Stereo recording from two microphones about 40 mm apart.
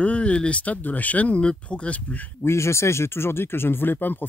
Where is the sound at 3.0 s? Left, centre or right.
Left.